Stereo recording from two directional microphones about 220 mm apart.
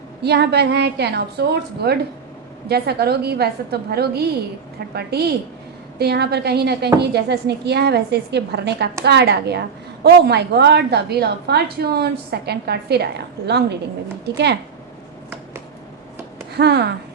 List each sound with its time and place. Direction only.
0.2 s a woman's voice: 50° right (ahead or behind)
16.6 s a woman's voice: 50° right (ahead or behind)